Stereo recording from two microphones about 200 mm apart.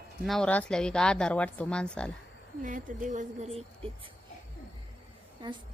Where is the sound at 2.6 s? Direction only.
40° right (ahead or behind).